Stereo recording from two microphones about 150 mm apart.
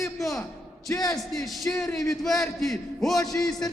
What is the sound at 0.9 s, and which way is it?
Speech, 20° left (ahead or behind).